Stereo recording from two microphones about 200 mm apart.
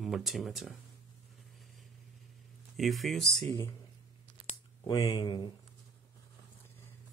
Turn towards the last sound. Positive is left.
turn(degrees=25)  # may be behind; listen again after turning